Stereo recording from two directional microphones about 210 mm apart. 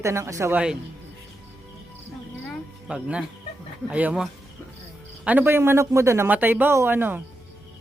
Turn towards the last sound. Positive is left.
turn(degrees=-10)  # may be behind; listen again after turning